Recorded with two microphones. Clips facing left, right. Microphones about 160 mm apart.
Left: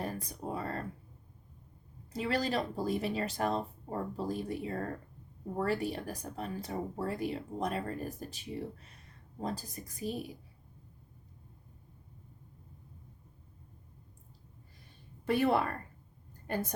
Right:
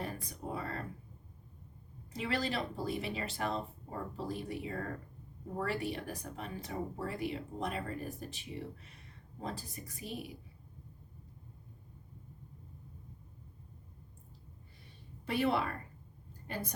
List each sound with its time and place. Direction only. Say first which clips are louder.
0.0 s a sound: left 3 dB; 40° left (ahead or behind)
2.1 s speech: left 3 dB; 40° left (ahead or behind)
9.4 s speech: left 4 dB; 40° left (ahead or behind)
15.3 s speech: left 4 dB; 50° left (ahead or behind)